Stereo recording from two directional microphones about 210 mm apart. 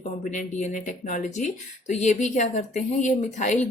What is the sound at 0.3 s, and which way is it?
A woman's voice, 35° left (ahead or behind).